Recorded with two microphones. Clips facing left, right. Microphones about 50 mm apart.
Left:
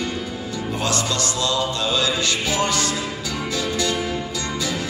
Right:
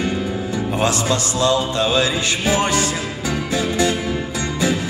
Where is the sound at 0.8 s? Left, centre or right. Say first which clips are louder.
Right 4 dB; right.